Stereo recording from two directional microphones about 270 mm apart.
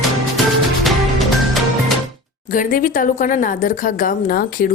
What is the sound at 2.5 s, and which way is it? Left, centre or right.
A woman's voice, left.